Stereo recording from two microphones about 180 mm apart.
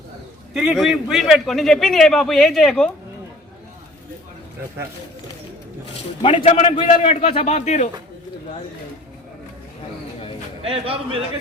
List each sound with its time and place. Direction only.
0.5 s a man's voice: centre (ahead or behind)
6.2 s a man's voice: 30° left (ahead or behind)
10.6 s a man's voice: 30° right (ahead or behind)